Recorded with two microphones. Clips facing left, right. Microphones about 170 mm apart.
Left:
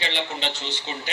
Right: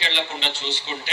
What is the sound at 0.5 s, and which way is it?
Speech, 15° left (ahead or behind).